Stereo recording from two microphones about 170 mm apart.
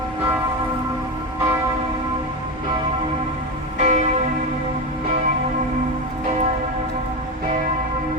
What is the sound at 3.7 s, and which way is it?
Church bell, 45° right (ahead or behind).